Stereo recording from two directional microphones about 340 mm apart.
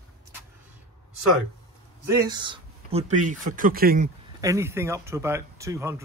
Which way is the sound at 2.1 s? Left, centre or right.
Centre.